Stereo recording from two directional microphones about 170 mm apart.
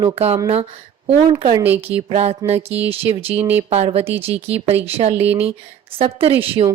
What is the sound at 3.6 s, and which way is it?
A woman's voice, 40° right (ahead or behind).